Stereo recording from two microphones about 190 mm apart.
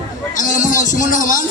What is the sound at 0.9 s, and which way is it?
Speech, 45° left (ahead or behind).